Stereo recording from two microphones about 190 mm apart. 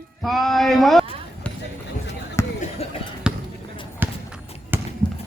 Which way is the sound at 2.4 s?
15° left (ahead or behind).